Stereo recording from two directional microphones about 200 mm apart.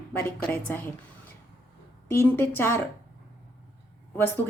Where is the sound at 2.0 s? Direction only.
10° left (ahead or behind).